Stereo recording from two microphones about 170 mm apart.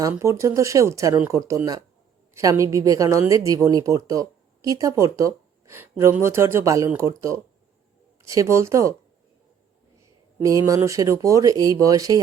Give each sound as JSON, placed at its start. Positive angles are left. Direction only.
{"t": 0.1, "sound": "a woman's voice", "side_deg": -15}
{"t": 10.7, "sound": "a woman's voice", "side_deg": -20}